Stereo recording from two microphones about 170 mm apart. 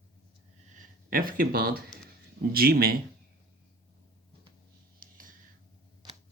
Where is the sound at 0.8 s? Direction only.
55° right (ahead or behind).